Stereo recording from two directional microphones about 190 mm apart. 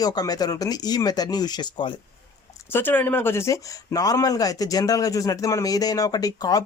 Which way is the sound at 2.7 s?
10° left (ahead or behind).